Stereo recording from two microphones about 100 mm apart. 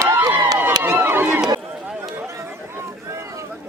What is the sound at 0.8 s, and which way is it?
Run, 20° right (ahead or behind).